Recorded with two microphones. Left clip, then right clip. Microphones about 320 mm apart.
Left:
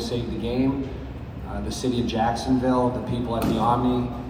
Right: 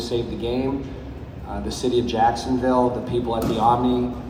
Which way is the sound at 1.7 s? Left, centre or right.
Right.